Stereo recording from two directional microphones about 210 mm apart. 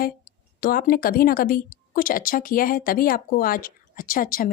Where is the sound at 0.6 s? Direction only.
45° left (ahead or behind).